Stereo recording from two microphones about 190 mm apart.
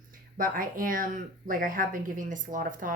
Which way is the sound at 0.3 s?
50° right (ahead or behind).